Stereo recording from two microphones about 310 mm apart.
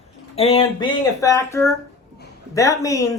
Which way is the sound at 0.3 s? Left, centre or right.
Centre.